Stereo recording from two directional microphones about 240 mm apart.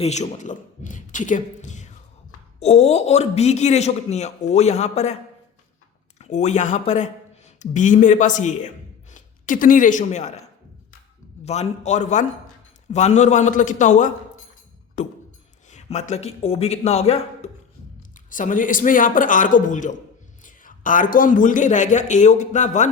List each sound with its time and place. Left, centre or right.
0.0 s a man's voice: left
6.1 s speech: left
11.4 s a man's voice: left